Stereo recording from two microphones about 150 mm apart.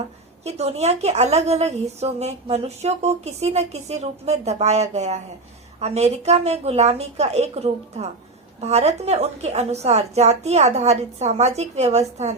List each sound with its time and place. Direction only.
0.4 s a woman's voice: 45° right (ahead or behind)